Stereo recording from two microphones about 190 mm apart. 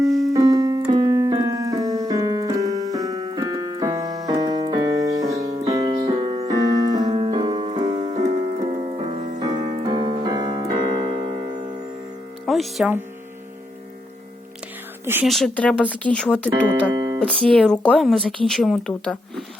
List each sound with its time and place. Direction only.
0.1 s keyboard: centre (ahead or behind)
0.3 s keyboard: 20° right (ahead or behind)
8.6 s music: 35° right (ahead or behind)
9.4 s keyboard: 20° right (ahead or behind)
12.5 s music: centre (ahead or behind)
15.0 s speech: 10° right (ahead or behind)
15.3 s speech: 5° left (ahead or behind)
16.9 s music: 20° right (ahead or behind)
17.2 s speech: 5° left (ahead or behind)